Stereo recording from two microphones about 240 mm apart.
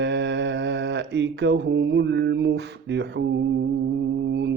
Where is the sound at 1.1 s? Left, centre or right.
Right.